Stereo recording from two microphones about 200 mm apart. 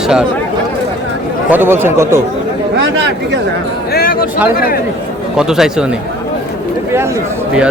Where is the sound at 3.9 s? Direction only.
50° left (ahead or behind).